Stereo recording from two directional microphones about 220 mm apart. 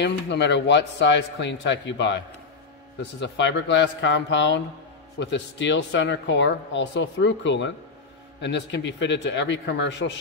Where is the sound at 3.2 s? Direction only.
55° left (ahead or behind).